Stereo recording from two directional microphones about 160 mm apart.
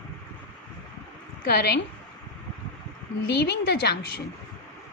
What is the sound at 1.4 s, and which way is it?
Speech, 90° left.